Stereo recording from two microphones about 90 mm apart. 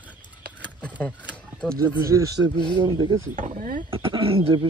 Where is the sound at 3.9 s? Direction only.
85° right.